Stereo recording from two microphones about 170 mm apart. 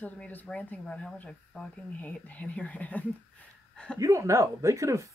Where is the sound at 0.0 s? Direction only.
10° left (ahead or behind).